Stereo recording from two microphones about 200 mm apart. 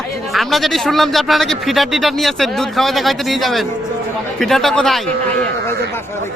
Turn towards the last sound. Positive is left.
turn(degrees=0)  # may be behind; listen again after turning